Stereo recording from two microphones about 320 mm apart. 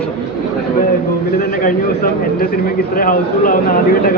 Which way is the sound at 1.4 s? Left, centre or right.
Left.